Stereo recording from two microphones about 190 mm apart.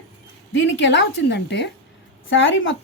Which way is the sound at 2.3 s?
85° left.